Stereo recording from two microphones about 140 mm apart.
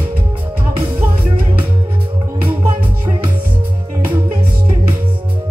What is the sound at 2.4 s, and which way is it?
Music, 15° right (ahead or behind).